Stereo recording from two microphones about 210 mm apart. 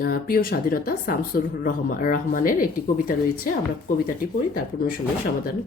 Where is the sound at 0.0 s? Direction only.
45° left (ahead or behind).